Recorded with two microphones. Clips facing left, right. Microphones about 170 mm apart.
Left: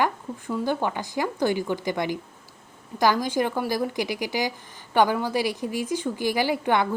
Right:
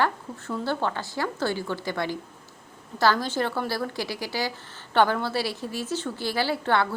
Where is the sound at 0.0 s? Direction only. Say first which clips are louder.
Left 1 dB; 15° left (ahead or behind).